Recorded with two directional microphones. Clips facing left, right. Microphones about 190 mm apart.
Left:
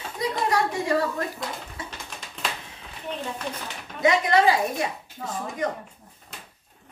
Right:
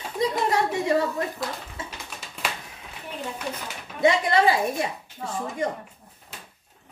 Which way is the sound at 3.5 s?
10° right (ahead or behind).